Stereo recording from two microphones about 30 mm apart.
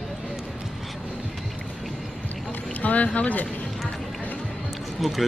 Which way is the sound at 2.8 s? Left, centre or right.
Left.